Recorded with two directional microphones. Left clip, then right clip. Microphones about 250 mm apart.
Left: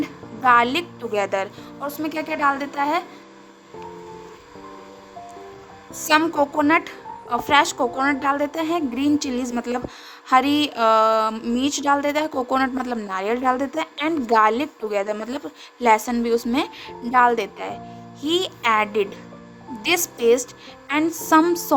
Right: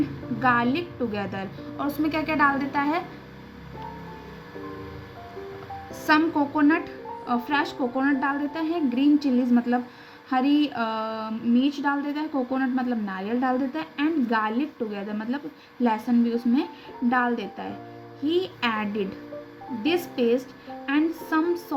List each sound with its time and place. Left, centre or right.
0.4 s a woman's voice: left
6.1 s a woman's voice: left